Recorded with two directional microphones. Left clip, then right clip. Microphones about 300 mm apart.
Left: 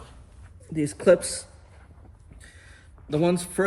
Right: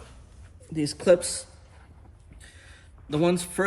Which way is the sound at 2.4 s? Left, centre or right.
Centre.